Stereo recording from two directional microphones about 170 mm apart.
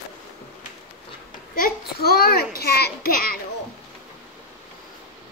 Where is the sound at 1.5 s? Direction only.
60° left (ahead or behind).